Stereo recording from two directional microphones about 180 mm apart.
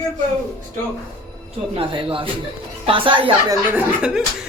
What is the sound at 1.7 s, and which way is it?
A woman's voice, 30° right (ahead or behind).